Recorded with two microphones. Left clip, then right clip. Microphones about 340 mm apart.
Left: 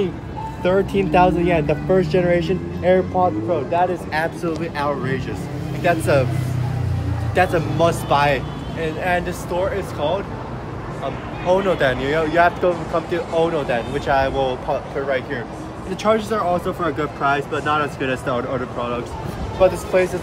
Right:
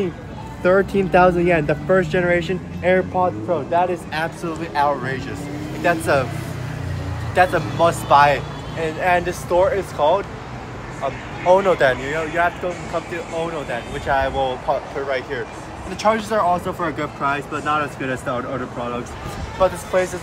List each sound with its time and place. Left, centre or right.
0.7 s speech: centre
4.6 s speech: centre
7.3 s speech: centre
8.8 s speech: centre
11.4 s speech: centre
16.1 s speech: centre
19.6 s speech: centre